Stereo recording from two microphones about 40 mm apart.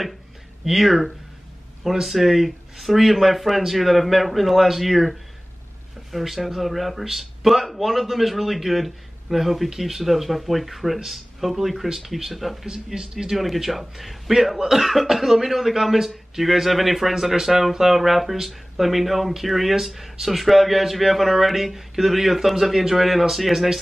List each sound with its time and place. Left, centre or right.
0.7 s speech: centre
6.1 s speech: centre
12.6 s speech: centre
13.4 s speech: centre